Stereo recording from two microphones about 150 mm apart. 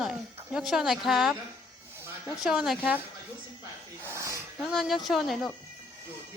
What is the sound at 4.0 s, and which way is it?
Wheeze, 20° right (ahead or behind).